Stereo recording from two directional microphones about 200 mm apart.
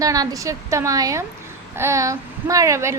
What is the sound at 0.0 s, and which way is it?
A woman's voice, 15° right (ahead or behind).